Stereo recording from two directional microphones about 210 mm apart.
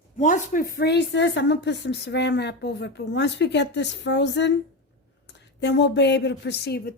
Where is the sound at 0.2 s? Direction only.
40° left (ahead or behind); by 4.5 s 55° left (ahead or behind).